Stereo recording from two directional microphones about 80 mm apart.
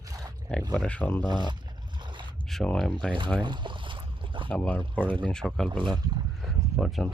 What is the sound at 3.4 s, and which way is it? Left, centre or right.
Boat, right.